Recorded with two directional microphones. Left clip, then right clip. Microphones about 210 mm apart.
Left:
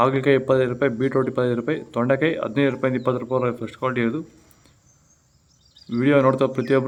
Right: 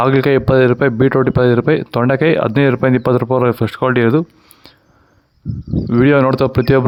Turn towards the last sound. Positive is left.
turn(degrees=-50)  # may be behind; listen again after turning